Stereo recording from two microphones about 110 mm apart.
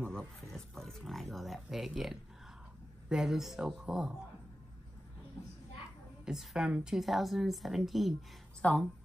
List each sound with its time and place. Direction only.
0.1 s speech: 5° left (ahead or behind)
6.2 s speech: 5° right (ahead or behind)
8.6 s speech: 10° left (ahead or behind)